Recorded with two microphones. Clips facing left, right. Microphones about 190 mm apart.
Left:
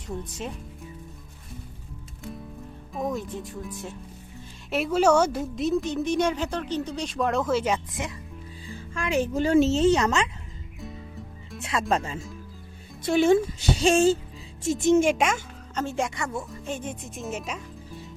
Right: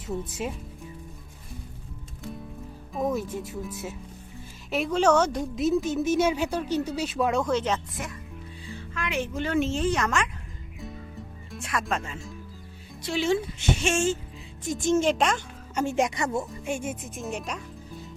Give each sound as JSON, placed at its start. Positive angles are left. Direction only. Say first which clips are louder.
{"t": 0.1, "sound": "speech", "louder": "right 3 dB", "side_deg": -5}
{"t": 2.9, "sound": "a woman's voice", "louder": "right 2 dB", "side_deg": 0}
{"t": 9.0, "sound": "speech", "louder": "left 5 dB", "side_deg": 40}
{"t": 9.7, "sound": "speech", "louder": "left 5 dB", "side_deg": 25}
{"t": 11.6, "sound": "speech", "louder": "left 4 dB", "side_deg": 25}
{"t": 13.0, "sound": "a woman's voice", "louder": "left 6 dB", "side_deg": 50}
{"t": 13.6, "sound": "speech", "louder": "left 5 dB", "side_deg": 35}
{"t": 14.6, "sound": "speech", "louder": "left 3 dB", "side_deg": 25}
{"t": 15.1, "sound": "speech", "louder": "even", "side_deg": 5}
{"t": 15.7, "sound": "speech", "louder": "right 3 dB", "side_deg": -15}
{"t": 16.6, "sound": "speech", "louder": "right 2 dB", "side_deg": -10}